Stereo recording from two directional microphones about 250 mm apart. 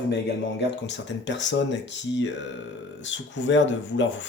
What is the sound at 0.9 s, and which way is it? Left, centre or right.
Speech, left.